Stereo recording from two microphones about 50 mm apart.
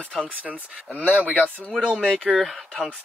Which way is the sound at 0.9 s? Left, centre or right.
Left.